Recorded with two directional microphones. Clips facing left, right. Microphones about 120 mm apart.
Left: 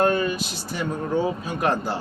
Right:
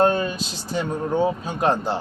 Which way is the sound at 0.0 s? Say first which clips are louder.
Right 1 dB; 30° right (ahead or behind).